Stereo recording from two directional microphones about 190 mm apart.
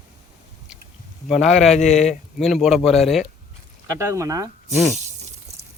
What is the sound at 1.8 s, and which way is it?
Speech, 35° left (ahead or behind).